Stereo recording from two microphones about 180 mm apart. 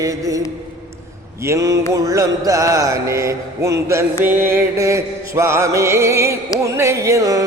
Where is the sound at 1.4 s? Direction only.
15° right (ahead or behind).